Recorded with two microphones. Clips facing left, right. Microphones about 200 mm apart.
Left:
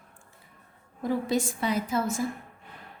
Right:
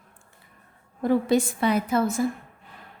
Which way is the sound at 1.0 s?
65° right (ahead or behind).